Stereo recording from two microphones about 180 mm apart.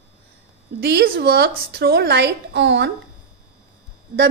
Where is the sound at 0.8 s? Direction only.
60° right (ahead or behind).